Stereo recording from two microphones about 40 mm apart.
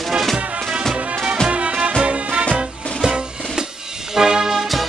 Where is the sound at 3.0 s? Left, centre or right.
Centre.